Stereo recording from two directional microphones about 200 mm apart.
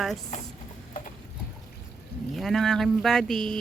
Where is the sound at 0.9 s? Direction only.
40° left (ahead or behind).